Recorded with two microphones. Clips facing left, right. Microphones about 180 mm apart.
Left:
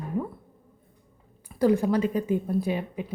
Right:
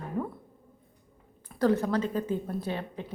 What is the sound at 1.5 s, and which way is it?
A woman's voice, 10° left (ahead or behind).